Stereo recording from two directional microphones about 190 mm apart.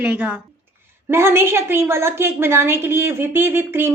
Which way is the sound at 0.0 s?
5° right (ahead or behind).